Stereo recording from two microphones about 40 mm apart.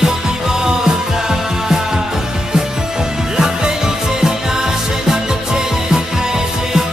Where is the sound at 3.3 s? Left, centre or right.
Centre.